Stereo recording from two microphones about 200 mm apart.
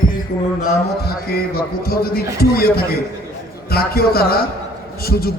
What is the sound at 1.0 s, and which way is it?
A man's voice, 50° left (ahead or behind).